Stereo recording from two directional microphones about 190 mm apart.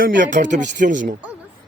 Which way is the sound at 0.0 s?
45° right (ahead or behind).